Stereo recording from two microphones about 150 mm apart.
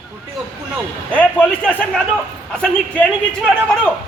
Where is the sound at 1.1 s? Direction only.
10° left (ahead or behind).